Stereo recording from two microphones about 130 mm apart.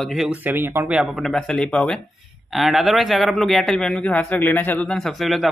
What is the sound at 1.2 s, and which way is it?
A man's voice, 5° left (ahead or behind).